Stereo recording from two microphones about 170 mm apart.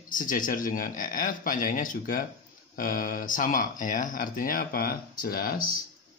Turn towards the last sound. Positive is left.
turn(degrees=60)  # may be behind; listen again after turning